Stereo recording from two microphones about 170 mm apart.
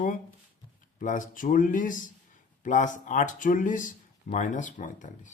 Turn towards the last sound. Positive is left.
turn(degrees=50)  # may be behind; listen again after turning